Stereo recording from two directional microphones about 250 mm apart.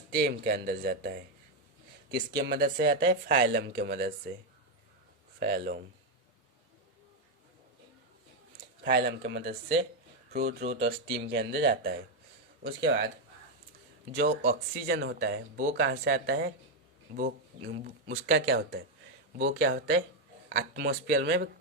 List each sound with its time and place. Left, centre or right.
0.1 s speech: right
5.4 s speech: right
8.8 s speech: right
10.8 s speech: right
14.2 s speech: right